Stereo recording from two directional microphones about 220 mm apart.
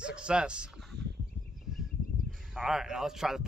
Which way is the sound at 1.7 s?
Centre (ahead or behind).